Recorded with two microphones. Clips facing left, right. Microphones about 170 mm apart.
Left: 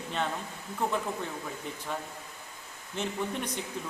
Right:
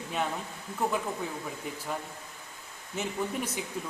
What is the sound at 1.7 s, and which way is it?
Speech, 10° right (ahead or behind).